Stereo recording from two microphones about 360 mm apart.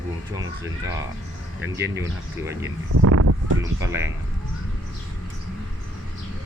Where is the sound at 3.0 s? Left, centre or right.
Right.